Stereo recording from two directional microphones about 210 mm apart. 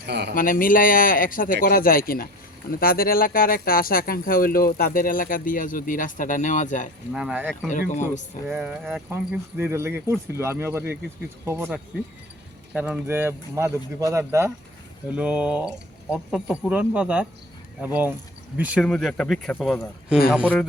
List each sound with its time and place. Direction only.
0.0 s speech: 50° right (ahead or behind)
0.3 s speech: 40° left (ahead or behind)
7.1 s speech: 5° right (ahead or behind)
7.7 s speech: 35° left (ahead or behind)
8.4 s speech: 5° right (ahead or behind)